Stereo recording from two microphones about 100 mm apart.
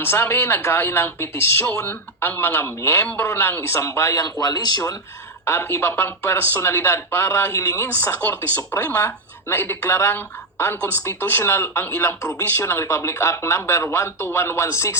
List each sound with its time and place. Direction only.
0.0 s speech: 25° left (ahead or behind); by 4.8 s 40° left (ahead or behind)
5.5 s speech: 25° left (ahead or behind)
7.9 s speech: 20° left (ahead or behind)